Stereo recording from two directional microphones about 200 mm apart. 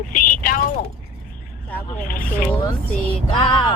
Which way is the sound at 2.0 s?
45° left (ahead or behind).